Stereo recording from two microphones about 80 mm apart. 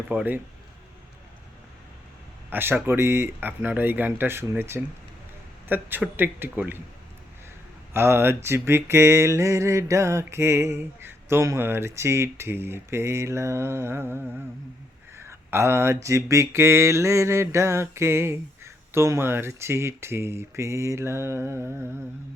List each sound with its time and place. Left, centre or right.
0.1 s speech: right
2.5 s speech: right
7.9 s a sound: right